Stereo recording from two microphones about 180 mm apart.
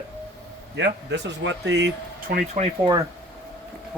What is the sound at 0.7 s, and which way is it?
Speech, 75° right (ahead or behind).